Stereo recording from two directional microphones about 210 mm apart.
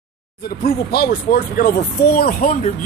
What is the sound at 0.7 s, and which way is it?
Speech, 45° left (ahead or behind).